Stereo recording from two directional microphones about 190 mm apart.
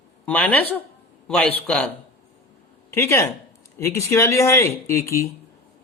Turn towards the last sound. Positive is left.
turn(degrees=15)  # may be behind; listen again after turning